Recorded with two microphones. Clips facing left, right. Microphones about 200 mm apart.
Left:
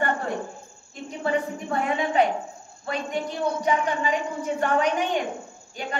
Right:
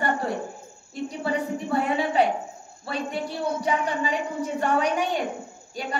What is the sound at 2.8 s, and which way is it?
A woman's voice, 35° right (ahead or behind).